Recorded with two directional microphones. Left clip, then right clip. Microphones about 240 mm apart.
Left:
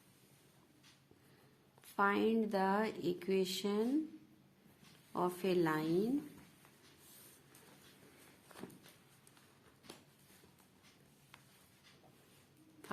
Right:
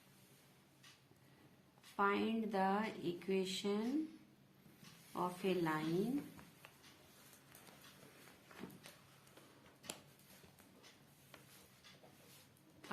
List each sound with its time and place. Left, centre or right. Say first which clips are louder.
2.0 s speech: left 4 dB; left
5.1 s speech: left 4 dB; left